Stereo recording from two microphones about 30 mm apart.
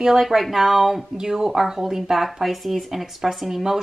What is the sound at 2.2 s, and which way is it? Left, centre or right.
Speech, centre.